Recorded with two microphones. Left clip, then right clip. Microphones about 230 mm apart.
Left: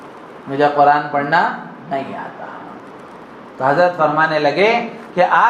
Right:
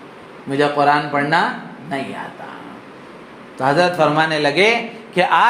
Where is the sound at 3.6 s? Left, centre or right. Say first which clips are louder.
Left 1 dB; right.